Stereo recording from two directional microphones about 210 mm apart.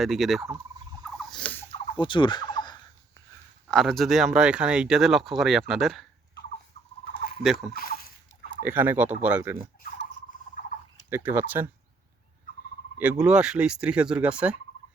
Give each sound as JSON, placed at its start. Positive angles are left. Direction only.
{"t": 0.0, "sound": "speech", "side_deg": 0}
{"t": 1.1, "sound": "rodents", "side_deg": 5}
{"t": 1.7, "sound": "turkey", "side_deg": 25}
{"t": 3.7, "sound": "speech", "side_deg": 0}
{"t": 6.8, "sound": "rodents", "side_deg": 30}
{"t": 7.4, "sound": "speech", "side_deg": 0}
{"t": 7.7, "sound": "speech", "side_deg": 45}
{"t": 8.6, "sound": "speech", "side_deg": -10}
{"t": 11.1, "sound": "speech", "side_deg": -10}
{"t": 13.0, "sound": "speech", "side_deg": -5}